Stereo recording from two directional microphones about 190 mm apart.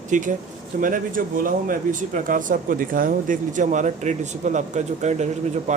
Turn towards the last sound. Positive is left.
turn(degrees=-40)  # may be behind; listen again after turning